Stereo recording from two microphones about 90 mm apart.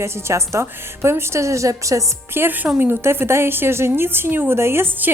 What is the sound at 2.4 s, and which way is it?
A woman's voice, 20° right (ahead or behind).